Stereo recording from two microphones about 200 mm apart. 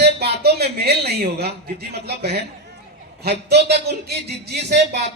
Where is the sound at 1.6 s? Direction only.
55° right (ahead or behind).